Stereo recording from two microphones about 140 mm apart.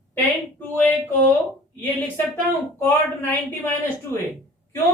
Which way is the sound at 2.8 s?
15° left (ahead or behind).